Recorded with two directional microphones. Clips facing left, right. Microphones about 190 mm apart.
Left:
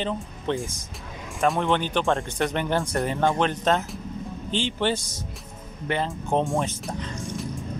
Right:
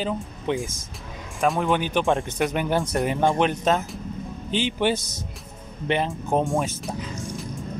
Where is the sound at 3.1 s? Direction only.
15° right (ahead or behind).